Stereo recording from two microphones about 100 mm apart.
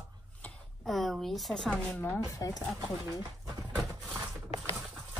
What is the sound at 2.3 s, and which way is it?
Speech, 35° left (ahead or behind).